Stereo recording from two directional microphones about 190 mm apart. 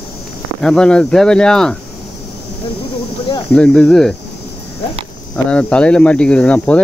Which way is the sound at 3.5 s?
5° left (ahead or behind).